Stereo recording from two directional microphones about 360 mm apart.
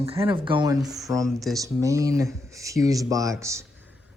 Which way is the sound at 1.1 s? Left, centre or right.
Centre.